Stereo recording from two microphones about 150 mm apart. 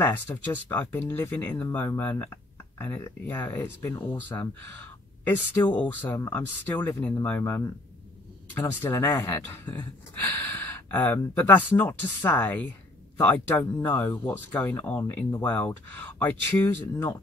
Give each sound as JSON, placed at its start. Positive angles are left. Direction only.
{"t": 0.0, "sound": "speech", "side_deg": 15}